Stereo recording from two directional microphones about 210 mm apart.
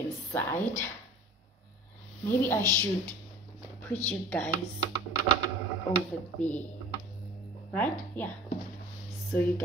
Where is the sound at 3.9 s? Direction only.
10° left (ahead or behind).